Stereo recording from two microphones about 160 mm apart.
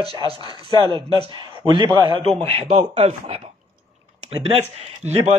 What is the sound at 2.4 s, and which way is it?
Speech, 40° right (ahead or behind).